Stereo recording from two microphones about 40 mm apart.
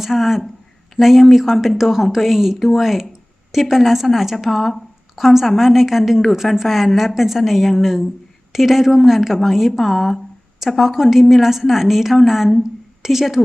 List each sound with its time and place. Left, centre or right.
0.0 s a woman's voice: centre